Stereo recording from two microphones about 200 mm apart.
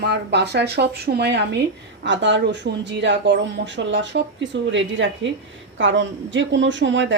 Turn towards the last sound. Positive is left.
turn(degrees=-65)  # may be behind; listen again after turning